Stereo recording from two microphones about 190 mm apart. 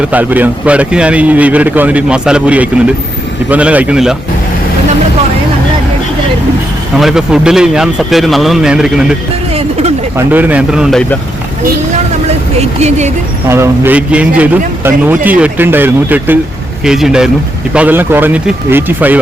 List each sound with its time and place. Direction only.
0.1 s a man's voice: 10° right (ahead or behind)
7.0 s a man's voice: centre (ahead or behind)
10.2 s a man's voice: 10° right (ahead or behind)
12.5 s speech: 35° right (ahead or behind)
13.5 s a man's voice: 10° right (ahead or behind)